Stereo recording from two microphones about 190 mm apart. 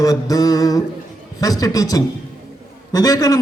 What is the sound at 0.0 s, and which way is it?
Mantra, 20° left (ahead or behind).